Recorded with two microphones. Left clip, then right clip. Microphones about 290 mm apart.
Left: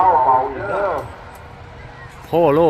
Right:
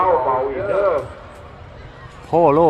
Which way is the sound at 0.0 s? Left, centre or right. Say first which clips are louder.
Left 3 dB; left.